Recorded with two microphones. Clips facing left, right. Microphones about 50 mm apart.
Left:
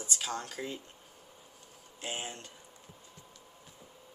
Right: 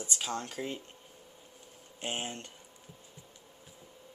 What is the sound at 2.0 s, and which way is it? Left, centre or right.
Speech, right.